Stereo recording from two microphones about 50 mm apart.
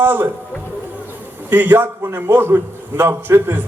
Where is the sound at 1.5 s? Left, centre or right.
Right.